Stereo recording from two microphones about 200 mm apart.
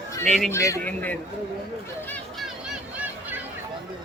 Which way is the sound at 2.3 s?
5° right (ahead or behind).